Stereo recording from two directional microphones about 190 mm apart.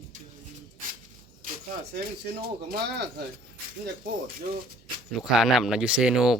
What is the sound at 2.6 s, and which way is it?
Speech, 55° right (ahead or behind).